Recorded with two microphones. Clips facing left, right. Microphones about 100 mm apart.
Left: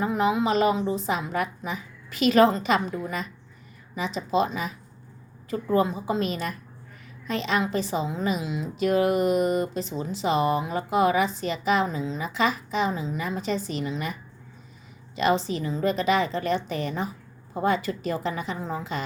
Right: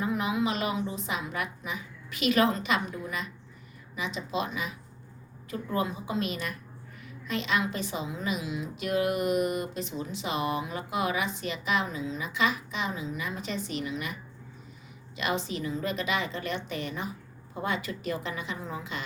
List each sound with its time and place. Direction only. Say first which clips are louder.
0.0 s a woman's voice: left 5 dB; 30° left (ahead or behind)